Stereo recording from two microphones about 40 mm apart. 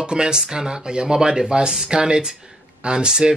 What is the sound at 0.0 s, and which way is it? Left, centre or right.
Speech, right.